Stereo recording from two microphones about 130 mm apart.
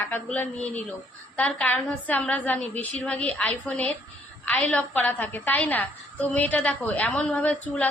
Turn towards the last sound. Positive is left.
turn(degrees=10)  # may be behind; listen again after turning